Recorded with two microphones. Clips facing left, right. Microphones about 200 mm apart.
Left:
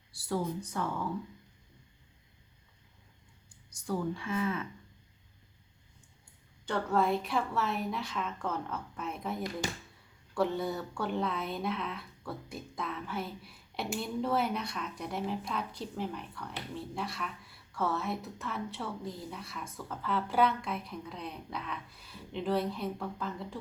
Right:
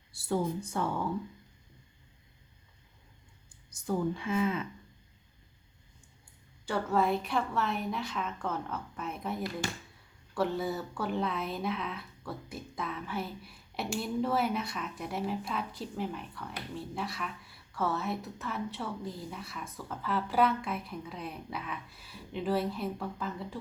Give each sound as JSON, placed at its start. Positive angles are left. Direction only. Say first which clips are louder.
{"t": 0.1, "sound": "speech", "louder": "right 2 dB", "side_deg": -25}
{"t": 3.7, "sound": "a woman's voice", "louder": "right 2 dB", "side_deg": -20}
{"t": 6.7, "sound": "speech", "louder": "even", "side_deg": -5}